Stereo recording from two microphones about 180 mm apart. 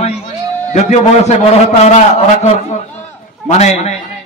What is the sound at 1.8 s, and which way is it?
Speech, 40° left (ahead or behind).